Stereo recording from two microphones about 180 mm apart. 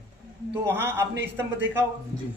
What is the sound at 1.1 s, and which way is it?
Speech, 80° right.